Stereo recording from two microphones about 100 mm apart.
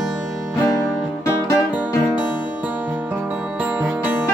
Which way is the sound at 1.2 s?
35° left (ahead or behind).